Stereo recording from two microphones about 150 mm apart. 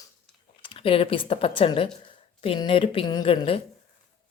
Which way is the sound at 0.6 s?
35° left (ahead or behind).